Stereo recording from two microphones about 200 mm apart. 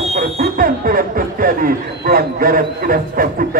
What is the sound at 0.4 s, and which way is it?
Speech, 45° right (ahead or behind).